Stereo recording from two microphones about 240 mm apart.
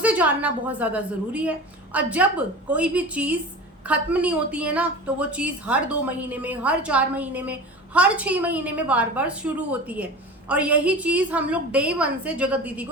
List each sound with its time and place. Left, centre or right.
0.0 s a woman's voice: centre